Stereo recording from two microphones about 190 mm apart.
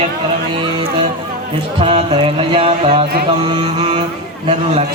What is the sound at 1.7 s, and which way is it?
Speech, 30° right (ahead or behind).